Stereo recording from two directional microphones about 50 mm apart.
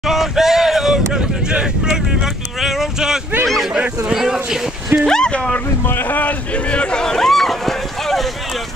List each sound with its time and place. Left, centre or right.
0.0 s a sound: centre
0.9 s vehicle: centre
2.6 s boat: centre
4.1 s speech: centre
5.0 s speech: centre
5.9 s a sound: left; by 8.3 s centre